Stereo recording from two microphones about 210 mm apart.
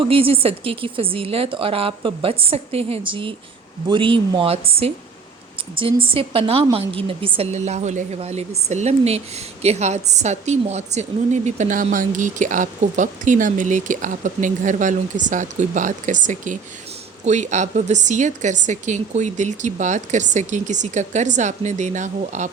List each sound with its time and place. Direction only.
0.0 s a woman's voice: 25° right (ahead or behind)